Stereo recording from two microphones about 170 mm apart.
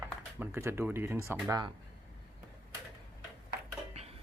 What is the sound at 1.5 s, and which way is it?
Speech, 25° right (ahead or behind).